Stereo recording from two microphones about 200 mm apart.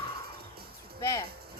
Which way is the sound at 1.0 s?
15° left (ahead or behind).